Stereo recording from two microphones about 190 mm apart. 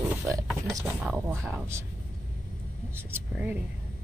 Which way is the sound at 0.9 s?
10° right (ahead or behind).